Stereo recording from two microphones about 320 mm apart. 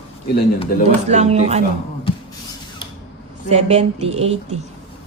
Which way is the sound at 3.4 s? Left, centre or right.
Centre.